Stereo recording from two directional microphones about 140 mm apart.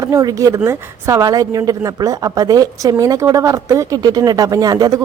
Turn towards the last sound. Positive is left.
turn(degrees=-25)  # may be behind; listen again after turning